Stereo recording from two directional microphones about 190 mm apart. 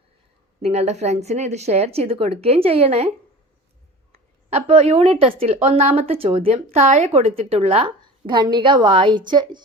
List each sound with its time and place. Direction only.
0.6 s a woman's voice: 35° right (ahead or behind)
4.1 s a woman's voice: 35° right (ahead or behind)